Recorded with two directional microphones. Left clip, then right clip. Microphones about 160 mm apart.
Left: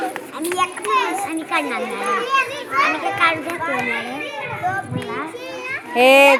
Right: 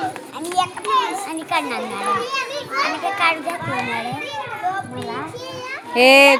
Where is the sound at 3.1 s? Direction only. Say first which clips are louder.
Left 1 dB; 30° right (ahead or behind).